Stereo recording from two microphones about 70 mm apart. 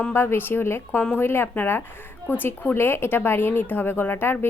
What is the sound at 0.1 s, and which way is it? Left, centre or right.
A woman's voice, left.